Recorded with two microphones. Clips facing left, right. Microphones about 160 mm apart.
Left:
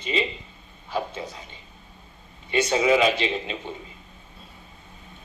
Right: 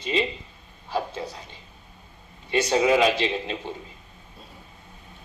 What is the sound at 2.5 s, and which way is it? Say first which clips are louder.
Speech: even; 35° right (ahead or behind).